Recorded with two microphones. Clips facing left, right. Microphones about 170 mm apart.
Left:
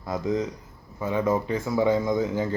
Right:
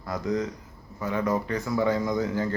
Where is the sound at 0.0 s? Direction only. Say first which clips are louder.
Left 2 dB; 25° left (ahead or behind).